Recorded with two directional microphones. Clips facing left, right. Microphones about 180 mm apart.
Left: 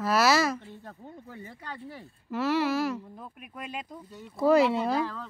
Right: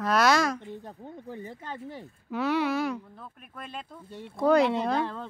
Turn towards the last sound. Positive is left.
turn(degrees=5)  # may be behind; listen again after turning